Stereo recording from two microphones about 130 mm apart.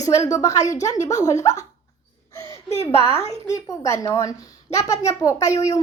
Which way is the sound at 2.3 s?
25° left (ahead or behind).